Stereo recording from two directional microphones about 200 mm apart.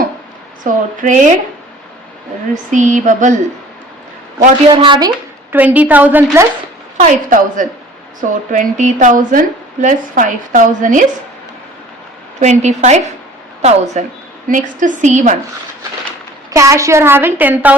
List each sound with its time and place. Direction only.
0.6 s a woman's voice: 40° right (ahead or behind)
2.6 s a woman's voice: 40° right (ahead or behind)
4.7 s a woman's voice: 25° right (ahead or behind)
5.5 s a woman's voice: 10° right (ahead or behind)
6.9 s a woman's voice: 40° right (ahead or behind)
12.4 s a woman's voice: 35° right (ahead or behind)
16.5 s a woman's voice: 15° right (ahead or behind)